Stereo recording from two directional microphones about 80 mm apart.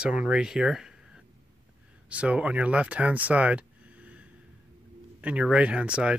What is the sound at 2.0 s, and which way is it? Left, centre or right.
Speech, centre.